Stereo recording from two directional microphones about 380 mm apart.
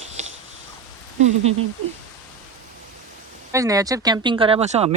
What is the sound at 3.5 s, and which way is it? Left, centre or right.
Speech, centre.